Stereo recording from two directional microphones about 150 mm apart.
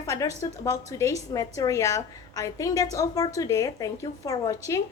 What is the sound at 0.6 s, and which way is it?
A woman's voice, 20° left (ahead or behind).